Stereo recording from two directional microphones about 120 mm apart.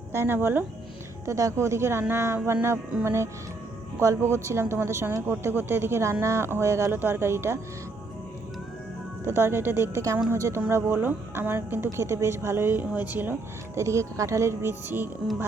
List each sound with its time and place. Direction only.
0.1 s a woman's voice: 20° right (ahead or behind)
9.2 s a woman's voice: 20° right (ahead or behind)